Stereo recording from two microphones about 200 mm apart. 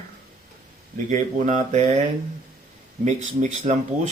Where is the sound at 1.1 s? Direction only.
35° right (ahead or behind).